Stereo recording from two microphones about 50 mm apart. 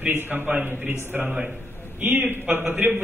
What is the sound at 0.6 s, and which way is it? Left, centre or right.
Speech, right.